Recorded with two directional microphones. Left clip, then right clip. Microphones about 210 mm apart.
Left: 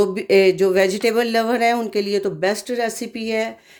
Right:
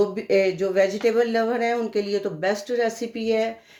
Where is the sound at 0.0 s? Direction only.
45° left (ahead or behind).